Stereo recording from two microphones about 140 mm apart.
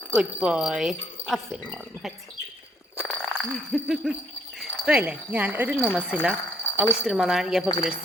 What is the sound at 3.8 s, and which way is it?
Speech, 5° right (ahead or behind).